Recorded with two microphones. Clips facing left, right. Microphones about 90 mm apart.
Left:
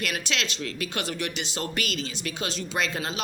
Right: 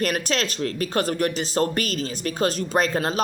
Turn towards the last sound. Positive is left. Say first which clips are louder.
# right 7 dB
turn(degrees=-45)  # may be behind; listen again after turning